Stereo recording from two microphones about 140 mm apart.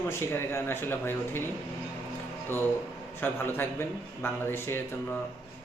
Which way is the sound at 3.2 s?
15° left (ahead or behind).